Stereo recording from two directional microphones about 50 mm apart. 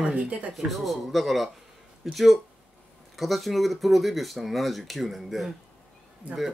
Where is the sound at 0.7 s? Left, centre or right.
Centre.